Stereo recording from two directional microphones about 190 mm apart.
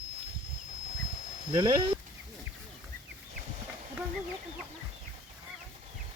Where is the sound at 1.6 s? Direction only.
20° right (ahead or behind).